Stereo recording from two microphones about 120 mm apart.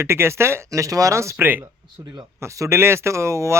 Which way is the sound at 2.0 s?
35° right (ahead or behind).